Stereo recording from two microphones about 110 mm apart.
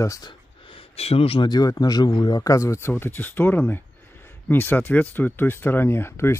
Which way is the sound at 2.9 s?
15° left (ahead or behind).